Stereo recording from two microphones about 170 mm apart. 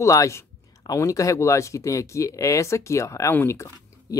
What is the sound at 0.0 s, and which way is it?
Speech, 20° left (ahead or behind).